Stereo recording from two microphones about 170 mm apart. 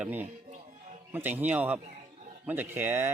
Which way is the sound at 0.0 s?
10° right (ahead or behind).